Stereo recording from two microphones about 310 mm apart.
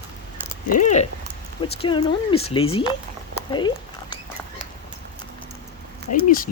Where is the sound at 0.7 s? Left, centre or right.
Left.